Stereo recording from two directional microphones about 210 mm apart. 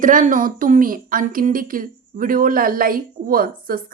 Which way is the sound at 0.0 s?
40° right (ahead or behind).